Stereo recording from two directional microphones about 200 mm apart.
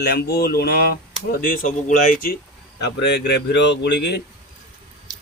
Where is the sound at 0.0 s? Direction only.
55° left (ahead or behind).